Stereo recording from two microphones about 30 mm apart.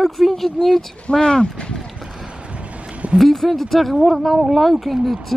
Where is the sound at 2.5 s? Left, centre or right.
Right.